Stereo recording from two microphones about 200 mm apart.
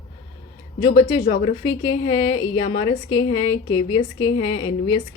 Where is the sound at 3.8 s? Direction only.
90° left.